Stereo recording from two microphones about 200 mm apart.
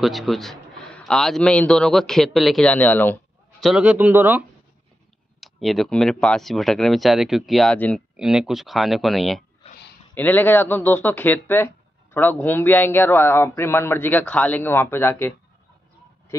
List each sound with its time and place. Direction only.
0.0 s speech: centre (ahead or behind)
3.6 s speech: 5° right (ahead or behind)
9.6 s a sound: 30° left (ahead or behind)
10.1 s speech: 10° left (ahead or behind)